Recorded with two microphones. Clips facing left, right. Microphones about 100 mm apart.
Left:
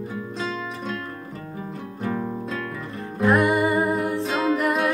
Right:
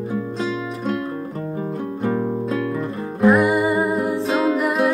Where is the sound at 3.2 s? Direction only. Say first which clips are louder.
Right 3 dB; centre (ahead or behind).